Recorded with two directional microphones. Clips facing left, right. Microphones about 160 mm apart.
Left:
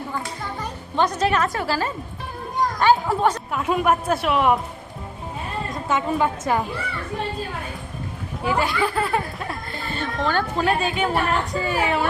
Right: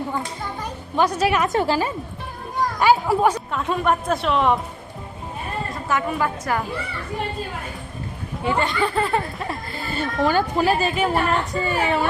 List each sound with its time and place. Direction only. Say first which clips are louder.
0.9 s a woman's voice: right 1 dB; 10° right (ahead or behind)
2.8 s speech: right 2 dB; 10° right (ahead or behind)
3.5 s a woman's voice: left 1 dB; 10° left (ahead or behind)
5.7 s a woman's voice: left 2 dB; 20° left (ahead or behind)
8.4 s speech: even; 5° left (ahead or behind)